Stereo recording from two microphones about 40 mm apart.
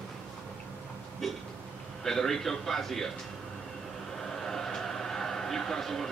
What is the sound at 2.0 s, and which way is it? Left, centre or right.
A man's voice, centre.